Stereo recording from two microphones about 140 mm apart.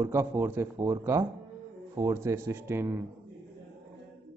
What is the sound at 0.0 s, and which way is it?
A man's voice, 15° right (ahead or behind).